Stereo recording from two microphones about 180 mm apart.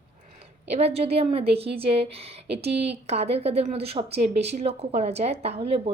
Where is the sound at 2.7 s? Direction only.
70° right (ahead or behind).